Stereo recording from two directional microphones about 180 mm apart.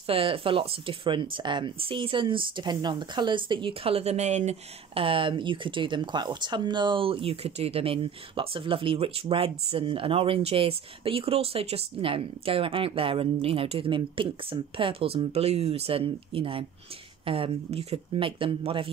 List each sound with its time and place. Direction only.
0.0 s speech: 30° right (ahead or behind)